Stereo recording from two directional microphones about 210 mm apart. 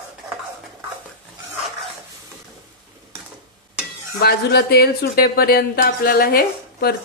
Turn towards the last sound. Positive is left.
turn(degrees=45)  # may be behind; listen again after turning